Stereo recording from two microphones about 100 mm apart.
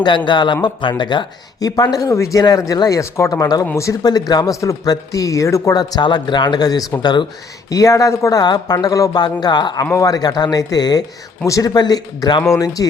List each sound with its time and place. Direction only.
0.3 s speech: 50° left (ahead or behind)
7.7 s speech: 35° left (ahead or behind)
9.9 s speech: 35° left (ahead or behind)